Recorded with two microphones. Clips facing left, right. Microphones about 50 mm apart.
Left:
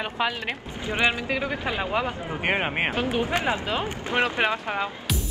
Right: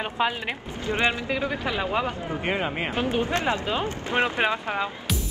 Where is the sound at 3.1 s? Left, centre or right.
Centre.